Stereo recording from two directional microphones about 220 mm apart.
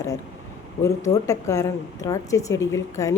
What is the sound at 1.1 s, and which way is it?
A woman's voice, 15° left (ahead or behind).